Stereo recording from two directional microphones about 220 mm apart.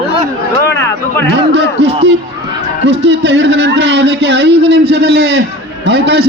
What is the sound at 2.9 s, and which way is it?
A man's voice, 50° right (ahead or behind).